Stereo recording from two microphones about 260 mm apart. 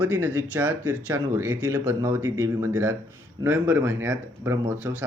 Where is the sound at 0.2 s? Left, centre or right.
Centre.